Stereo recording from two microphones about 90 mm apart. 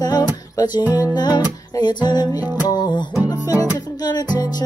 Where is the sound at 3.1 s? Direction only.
40° left (ahead or behind).